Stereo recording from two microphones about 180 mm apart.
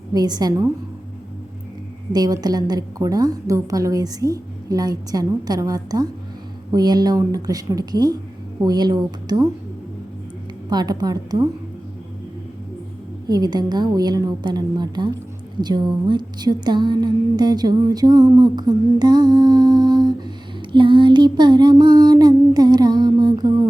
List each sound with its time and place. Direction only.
0.1 s music: 20° right (ahead or behind)
2.1 s music: 20° right (ahead or behind)
10.7 s music: 20° right (ahead or behind)
13.2 s music: 20° right (ahead or behind)